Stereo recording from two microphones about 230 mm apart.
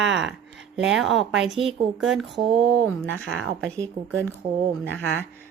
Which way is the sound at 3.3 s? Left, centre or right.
Centre.